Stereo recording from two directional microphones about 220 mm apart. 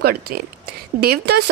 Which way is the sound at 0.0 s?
45° right (ahead or behind).